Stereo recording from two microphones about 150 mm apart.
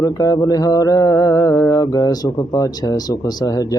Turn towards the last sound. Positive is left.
turn(degrees=25)  # may be behind; listen again after turning